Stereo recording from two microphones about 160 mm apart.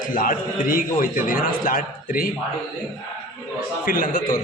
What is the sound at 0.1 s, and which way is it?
A man's voice, 60° left (ahead or behind).